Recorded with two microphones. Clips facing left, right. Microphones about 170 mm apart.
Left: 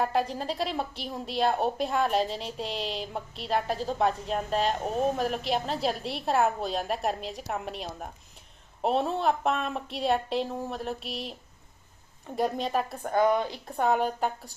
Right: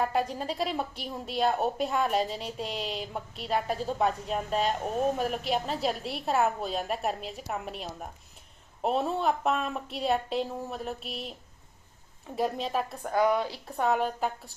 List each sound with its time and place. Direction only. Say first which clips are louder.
0.0 s a woman's voice: left 1 dB; centre (ahead or behind)
12.4 s a woman's voice: left 2 dB; centre (ahead or behind)
13.1 s a woman's voice: left 1 dB; 20° left (ahead or behind)
13.4 s a woman's voice: left 1 dB; 5° right (ahead or behind)